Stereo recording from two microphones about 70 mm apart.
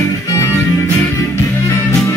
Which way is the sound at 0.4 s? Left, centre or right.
Left.